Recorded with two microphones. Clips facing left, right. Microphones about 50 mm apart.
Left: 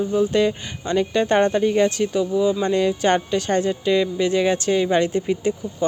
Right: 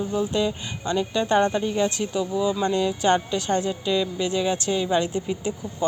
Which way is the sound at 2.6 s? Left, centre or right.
Left.